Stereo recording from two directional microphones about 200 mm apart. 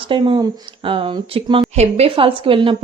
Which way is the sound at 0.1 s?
25° right (ahead or behind).